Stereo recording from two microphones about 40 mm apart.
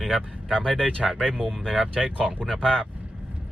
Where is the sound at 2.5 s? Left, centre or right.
Centre.